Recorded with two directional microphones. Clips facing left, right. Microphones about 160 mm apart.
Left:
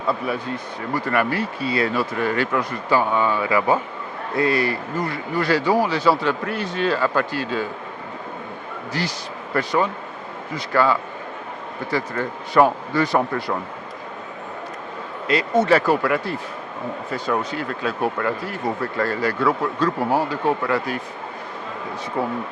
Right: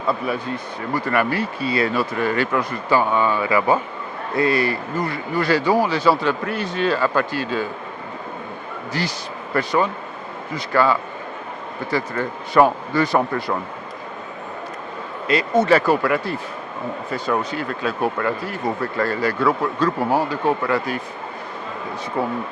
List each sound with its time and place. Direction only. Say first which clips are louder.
0.9 s speech: right 1 dB; 15° right (ahead or behind)
9.5 s speech: right 1 dB; 20° right (ahead or behind)
15.3 s speech: right 1 dB; 15° right (ahead or behind)